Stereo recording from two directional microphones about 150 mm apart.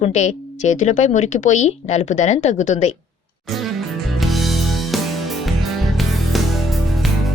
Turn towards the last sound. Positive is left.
turn(degrees=0)  # may be behind; listen again after turning